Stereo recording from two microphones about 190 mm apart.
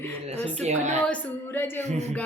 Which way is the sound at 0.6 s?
40° right (ahead or behind).